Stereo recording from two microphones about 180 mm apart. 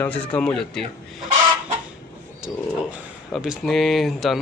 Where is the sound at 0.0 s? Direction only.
10° left (ahead or behind).